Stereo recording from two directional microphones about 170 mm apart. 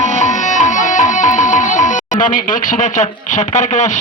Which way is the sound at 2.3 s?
50° left (ahead or behind).